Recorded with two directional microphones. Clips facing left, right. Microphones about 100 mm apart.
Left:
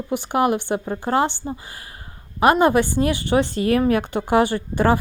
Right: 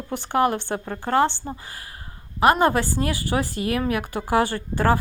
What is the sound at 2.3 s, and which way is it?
A woman's voice, 20° left (ahead or behind).